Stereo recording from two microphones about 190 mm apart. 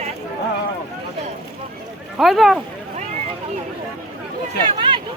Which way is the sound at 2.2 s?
Centre (ahead or behind).